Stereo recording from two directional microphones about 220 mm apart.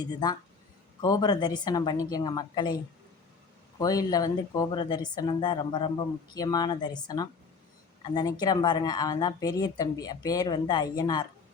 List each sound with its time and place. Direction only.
1.0 s a woman's voice: 20° left (ahead or behind)
3.8 s a woman's voice: 15° left (ahead or behind)